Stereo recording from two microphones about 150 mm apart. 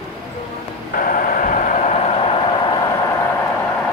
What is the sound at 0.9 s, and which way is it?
Vehicle, 65° left (ahead or behind).